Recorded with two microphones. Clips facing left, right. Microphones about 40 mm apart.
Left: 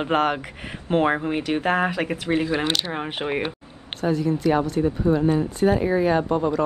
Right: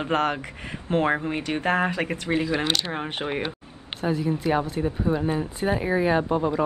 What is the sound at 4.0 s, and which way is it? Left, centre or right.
Speech, centre.